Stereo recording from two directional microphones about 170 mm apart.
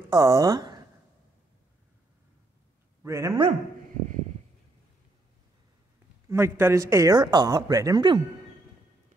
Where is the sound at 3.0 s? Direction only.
15° right (ahead or behind).